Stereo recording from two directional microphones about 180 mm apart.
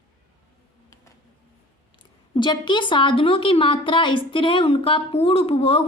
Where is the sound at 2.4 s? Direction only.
25° left (ahead or behind).